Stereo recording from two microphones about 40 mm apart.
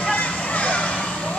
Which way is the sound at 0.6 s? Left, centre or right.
Left.